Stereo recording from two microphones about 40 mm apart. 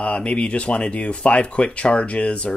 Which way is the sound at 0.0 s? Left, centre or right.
Left.